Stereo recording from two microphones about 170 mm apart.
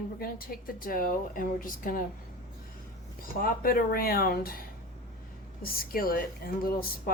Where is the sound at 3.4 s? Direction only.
60° left (ahead or behind).